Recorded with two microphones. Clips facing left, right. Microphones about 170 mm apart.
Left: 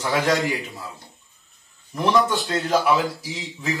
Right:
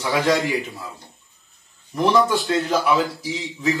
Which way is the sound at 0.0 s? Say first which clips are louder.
Right 1 dB; centre (ahead or behind).